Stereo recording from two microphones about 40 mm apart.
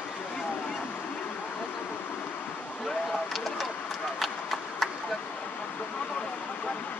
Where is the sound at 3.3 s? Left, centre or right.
Centre.